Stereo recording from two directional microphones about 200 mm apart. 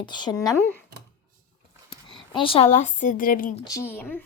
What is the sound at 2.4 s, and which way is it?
A woman's voice, 30° left (ahead or behind).